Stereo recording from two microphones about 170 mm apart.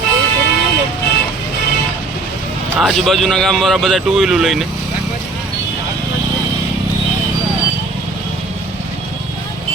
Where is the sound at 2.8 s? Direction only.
Centre (ahead or behind).